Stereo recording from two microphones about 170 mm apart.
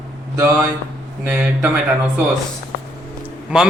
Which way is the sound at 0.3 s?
20° right (ahead or behind).